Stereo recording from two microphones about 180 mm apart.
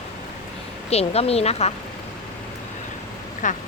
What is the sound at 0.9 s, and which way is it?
Speech, 35° left (ahead or behind).